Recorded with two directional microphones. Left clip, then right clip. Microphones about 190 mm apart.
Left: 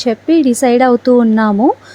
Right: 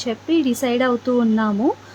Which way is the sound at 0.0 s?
35° left (ahead or behind).